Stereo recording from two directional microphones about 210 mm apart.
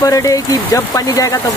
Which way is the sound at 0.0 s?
15° left (ahead or behind).